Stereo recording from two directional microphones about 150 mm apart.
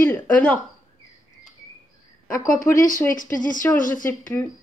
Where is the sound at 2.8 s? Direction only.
65° left (ahead or behind).